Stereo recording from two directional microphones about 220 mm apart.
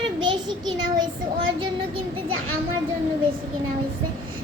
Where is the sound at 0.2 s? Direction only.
20° right (ahead or behind).